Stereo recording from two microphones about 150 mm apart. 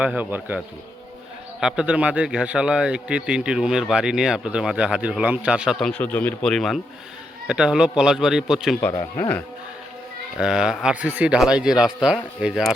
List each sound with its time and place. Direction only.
0.0 s speech: 10° right (ahead or behind)
1.6 s speech: 5° right (ahead or behind)
5.8 s speech: 10° left (ahead or behind)
8.9 s speech: 25° left (ahead or behind)
10.3 s speech: 5° right (ahead or behind)